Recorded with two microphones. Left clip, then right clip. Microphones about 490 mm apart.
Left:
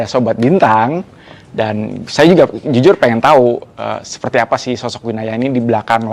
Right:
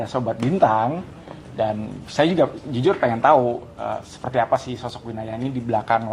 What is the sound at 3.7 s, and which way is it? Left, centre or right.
Speech, left.